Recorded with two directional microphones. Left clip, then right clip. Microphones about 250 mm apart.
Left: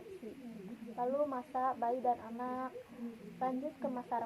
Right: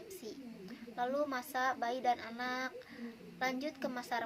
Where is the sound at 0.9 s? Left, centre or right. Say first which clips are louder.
Left 1 dB; right.